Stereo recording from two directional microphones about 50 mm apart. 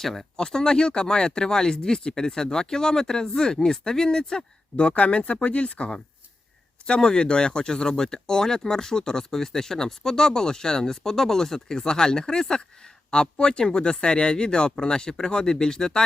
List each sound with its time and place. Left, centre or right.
0.0 s speech: centre
0.3 s speech: centre